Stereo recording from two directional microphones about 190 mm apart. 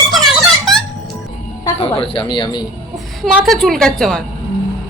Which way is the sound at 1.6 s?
30° left (ahead or behind).